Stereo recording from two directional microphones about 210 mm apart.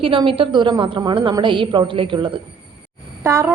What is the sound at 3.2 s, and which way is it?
Speech, 10° right (ahead or behind).